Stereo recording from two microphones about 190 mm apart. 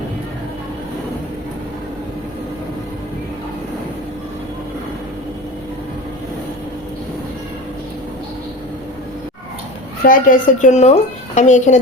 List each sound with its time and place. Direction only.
10.0 s a woman's voice: 45° left (ahead or behind)